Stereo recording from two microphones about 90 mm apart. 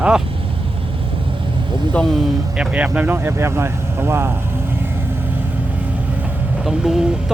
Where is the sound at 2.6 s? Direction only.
15° right (ahead or behind).